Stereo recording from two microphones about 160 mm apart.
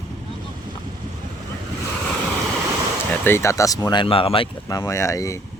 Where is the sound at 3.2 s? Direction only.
15° left (ahead or behind); by 4.5 s 35° left (ahead or behind).